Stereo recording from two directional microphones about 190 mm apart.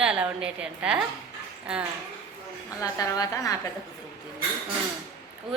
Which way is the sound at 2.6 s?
20° left (ahead or behind).